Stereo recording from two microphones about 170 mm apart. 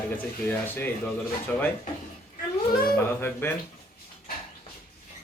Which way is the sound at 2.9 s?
10° left (ahead or behind).